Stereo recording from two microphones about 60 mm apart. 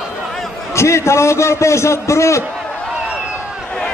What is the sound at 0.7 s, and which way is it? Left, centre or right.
A man's voice, left.